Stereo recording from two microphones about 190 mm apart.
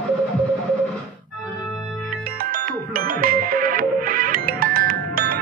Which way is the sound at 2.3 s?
45° right (ahead or behind).